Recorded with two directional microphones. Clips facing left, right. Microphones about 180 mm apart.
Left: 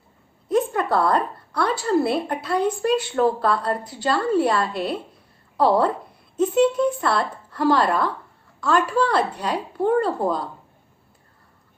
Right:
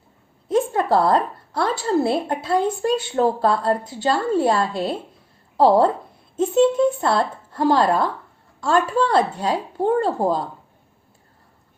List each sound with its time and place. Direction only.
0.4 s a woman's voice: 25° right (ahead or behind)